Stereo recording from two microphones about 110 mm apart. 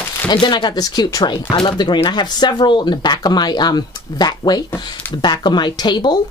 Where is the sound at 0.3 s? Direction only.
40° left (ahead or behind).